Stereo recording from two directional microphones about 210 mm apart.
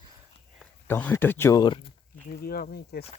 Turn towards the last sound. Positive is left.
turn(degrees=50)  # may be behind; listen again after turning